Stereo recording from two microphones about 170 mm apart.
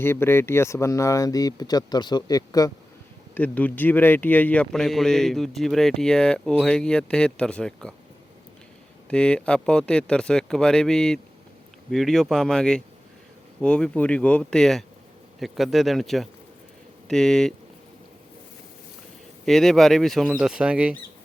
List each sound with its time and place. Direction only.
0.0 s speech: 15° left (ahead or behind)
3.3 s speech: 10° left (ahead or behind)
9.0 s speech: 5° left (ahead or behind)
19.5 s speech: centre (ahead or behind)